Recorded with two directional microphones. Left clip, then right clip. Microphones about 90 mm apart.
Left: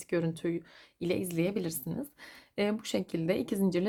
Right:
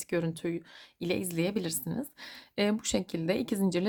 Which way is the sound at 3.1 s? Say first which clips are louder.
Even; 10° right (ahead or behind).